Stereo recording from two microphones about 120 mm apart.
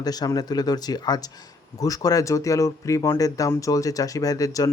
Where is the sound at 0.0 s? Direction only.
35° left (ahead or behind).